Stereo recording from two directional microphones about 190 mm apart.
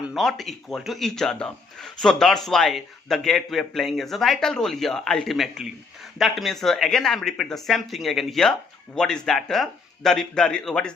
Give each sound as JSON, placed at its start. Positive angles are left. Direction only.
{"t": 0.1, "sound": "speech", "side_deg": 0}